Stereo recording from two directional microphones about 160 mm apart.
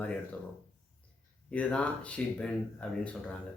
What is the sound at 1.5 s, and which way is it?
Speech, 10° left (ahead or behind).